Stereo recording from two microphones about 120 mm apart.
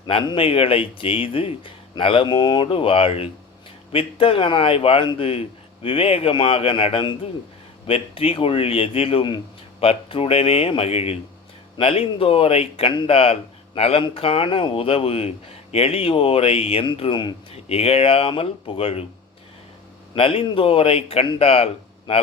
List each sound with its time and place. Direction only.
0.3 s speech: 50° left (ahead or behind)
17.0 s speech: 40° left (ahead or behind)
17.5 s speech: 55° left (ahead or behind)
20.1 s speech: 50° left (ahead or behind)